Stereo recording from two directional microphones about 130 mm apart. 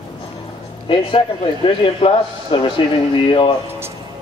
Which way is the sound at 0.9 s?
40° left (ahead or behind).